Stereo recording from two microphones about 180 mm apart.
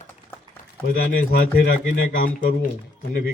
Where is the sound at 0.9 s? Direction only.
55° left (ahead or behind).